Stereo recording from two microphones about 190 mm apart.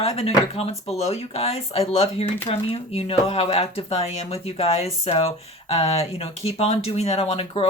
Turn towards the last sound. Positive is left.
turn(degrees=30)  # may be behind; listen again after turning